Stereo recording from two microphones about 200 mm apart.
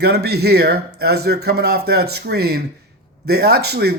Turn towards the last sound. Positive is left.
turn(degrees=-55)  # may be behind; listen again after turning